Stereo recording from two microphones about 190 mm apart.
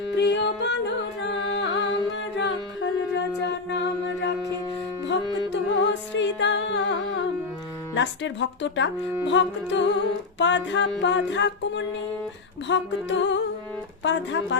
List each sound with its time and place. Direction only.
0.1 s a capella: 65° left (ahead or behind)
1.5 s music: 65° left (ahead or behind)
5.0 s music: 65° left (ahead or behind)